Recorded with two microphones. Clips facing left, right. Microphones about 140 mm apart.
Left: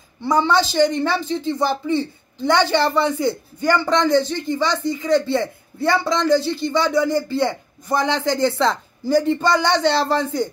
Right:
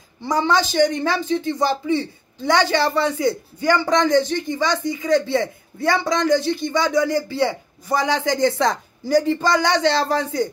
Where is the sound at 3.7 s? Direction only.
15° right (ahead or behind).